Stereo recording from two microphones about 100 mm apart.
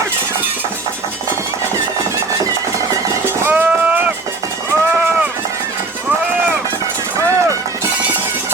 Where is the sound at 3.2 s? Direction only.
20° right (ahead or behind).